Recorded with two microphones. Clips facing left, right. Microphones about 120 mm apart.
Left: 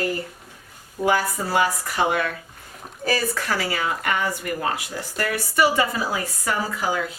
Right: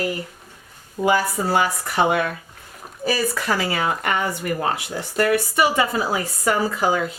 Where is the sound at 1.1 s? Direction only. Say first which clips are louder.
Right 2 dB; 25° right (ahead or behind).